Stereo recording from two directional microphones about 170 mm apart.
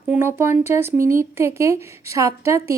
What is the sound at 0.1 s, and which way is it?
A woman's voice, 15° right (ahead or behind).